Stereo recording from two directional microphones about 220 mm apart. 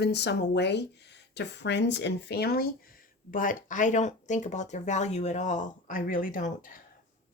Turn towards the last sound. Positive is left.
turn(degrees=35)  # may be behind; listen again after turning